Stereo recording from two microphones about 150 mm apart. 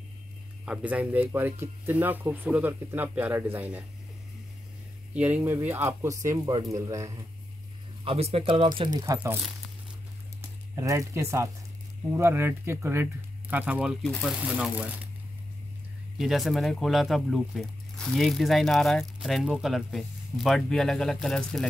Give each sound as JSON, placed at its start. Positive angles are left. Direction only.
{"t": 0.7, "sound": "speech", "side_deg": -10}
{"t": 5.1, "sound": "speech", "side_deg": -10}
{"t": 8.0, "sound": "speech", "side_deg": -40}
{"t": 9.0, "sound": "speech", "side_deg": -20}
{"t": 10.8, "sound": "speech", "side_deg": -20}
{"t": 14.0, "sound": "speech", "side_deg": 5}
{"t": 16.2, "sound": "speech", "side_deg": 0}